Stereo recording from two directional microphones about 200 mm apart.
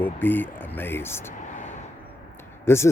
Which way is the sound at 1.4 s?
35° left (ahead or behind).